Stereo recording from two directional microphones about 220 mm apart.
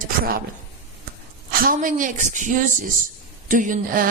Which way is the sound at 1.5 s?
40° right (ahead or behind).